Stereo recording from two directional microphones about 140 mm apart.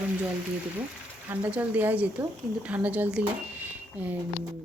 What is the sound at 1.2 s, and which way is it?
Speech, 10° right (ahead or behind).